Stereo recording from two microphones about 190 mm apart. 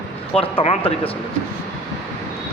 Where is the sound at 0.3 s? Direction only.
30° left (ahead or behind).